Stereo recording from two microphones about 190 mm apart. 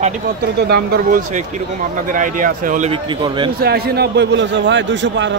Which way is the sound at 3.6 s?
55° right (ahead or behind).